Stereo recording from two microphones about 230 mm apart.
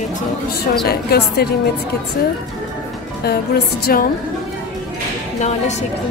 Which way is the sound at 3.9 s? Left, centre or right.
Left.